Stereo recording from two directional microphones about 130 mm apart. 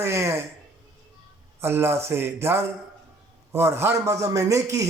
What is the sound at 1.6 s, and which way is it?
A man's voice, 20° right (ahead or behind).